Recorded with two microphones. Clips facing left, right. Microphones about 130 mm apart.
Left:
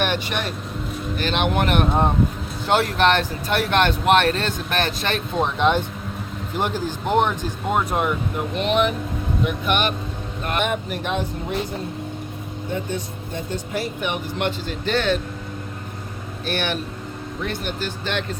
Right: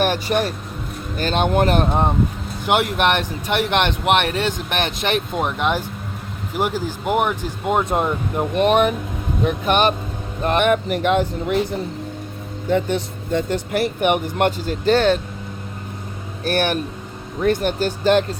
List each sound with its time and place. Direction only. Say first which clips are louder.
0.0 s speech: right 5 dB; 40° right (ahead or behind)
2.6 s speech: even; 15° right (ahead or behind)
5.3 s speech: left 1 dB; 10° right (ahead or behind); by 8.1 s 25° right (ahead or behind)
8.4 s speech: right 6 dB; 50° right (ahead or behind)
10.6 s speech: right 7 dB; 65° right (ahead or behind)
12.6 s speech: right 8 dB; 90° right; by 14.5 s 55° right (ahead or behind)
14.7 s speech: right 7 dB; 35° right (ahead or behind)
16.4 s speech: right 5 dB; 45° right (ahead or behind)